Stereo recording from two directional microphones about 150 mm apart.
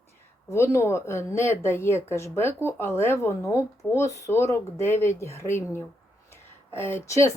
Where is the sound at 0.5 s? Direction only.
20° left (ahead or behind).